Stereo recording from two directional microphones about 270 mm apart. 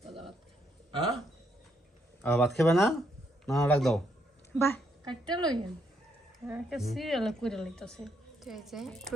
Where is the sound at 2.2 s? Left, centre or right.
Centre.